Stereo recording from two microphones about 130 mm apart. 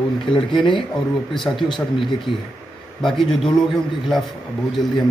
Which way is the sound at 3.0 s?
5° left (ahead or behind).